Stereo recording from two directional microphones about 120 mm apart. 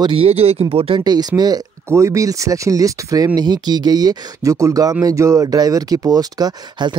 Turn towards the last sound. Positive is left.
turn(degrees=-35)  # may be behind; listen again after turning